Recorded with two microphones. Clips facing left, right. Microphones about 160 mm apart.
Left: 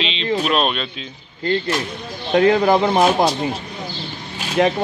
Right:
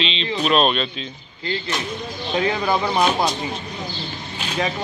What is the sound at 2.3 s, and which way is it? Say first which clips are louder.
Speech: left 7 dB; 50° left (ahead or behind).